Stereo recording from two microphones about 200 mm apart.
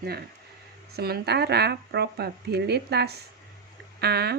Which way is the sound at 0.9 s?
50° right (ahead or behind).